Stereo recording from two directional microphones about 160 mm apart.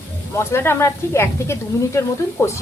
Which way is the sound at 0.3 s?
15° left (ahead or behind).